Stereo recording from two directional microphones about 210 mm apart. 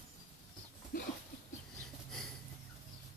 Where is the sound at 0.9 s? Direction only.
45° left (ahead or behind).